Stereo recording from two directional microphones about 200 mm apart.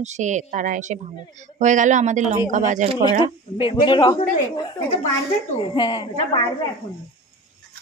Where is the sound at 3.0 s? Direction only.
25° left (ahead or behind).